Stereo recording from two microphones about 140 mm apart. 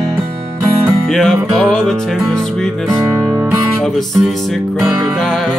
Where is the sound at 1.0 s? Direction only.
5° left (ahead or behind).